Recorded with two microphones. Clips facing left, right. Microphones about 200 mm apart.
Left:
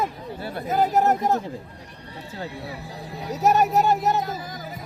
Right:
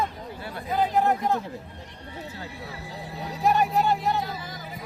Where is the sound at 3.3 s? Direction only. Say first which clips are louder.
Left 3 dB; 45° left (ahead or behind).